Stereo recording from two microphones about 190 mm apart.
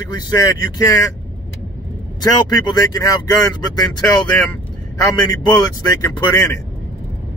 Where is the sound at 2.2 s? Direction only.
20° left (ahead or behind).